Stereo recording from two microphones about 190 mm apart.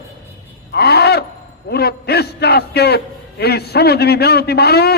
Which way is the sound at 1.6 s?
60° left (ahead or behind).